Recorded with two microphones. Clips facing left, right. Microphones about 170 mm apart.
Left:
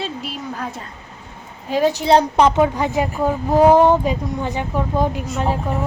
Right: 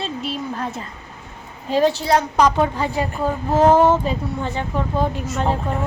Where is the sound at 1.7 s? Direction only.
15° left (ahead or behind).